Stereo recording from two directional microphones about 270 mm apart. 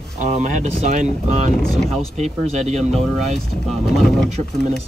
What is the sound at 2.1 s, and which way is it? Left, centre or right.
Speech, right.